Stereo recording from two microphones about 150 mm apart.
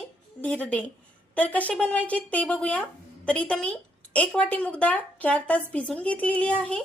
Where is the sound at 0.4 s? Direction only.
10° left (ahead or behind).